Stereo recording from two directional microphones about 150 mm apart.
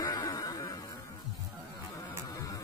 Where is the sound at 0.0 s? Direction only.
25° left (ahead or behind).